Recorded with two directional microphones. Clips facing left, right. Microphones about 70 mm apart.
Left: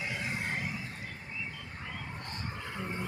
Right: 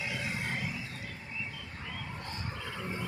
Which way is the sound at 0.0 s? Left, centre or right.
Left.